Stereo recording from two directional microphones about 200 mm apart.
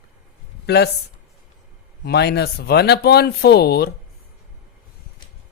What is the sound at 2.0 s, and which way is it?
Speech, 55° left (ahead or behind).